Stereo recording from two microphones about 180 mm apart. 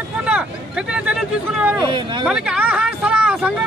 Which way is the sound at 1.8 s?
25° right (ahead or behind).